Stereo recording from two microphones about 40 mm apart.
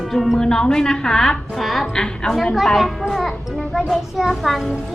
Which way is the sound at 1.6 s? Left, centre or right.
Centre.